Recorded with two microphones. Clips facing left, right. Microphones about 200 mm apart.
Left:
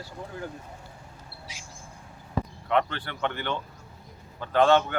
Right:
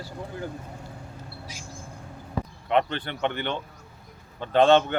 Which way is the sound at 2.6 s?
20° right (ahead or behind).